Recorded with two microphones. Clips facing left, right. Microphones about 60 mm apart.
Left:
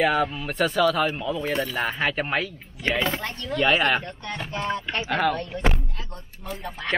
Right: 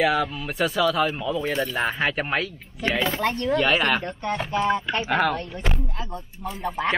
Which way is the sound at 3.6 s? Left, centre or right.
Centre.